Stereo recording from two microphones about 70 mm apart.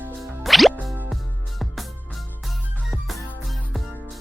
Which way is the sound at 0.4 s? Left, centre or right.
Centre.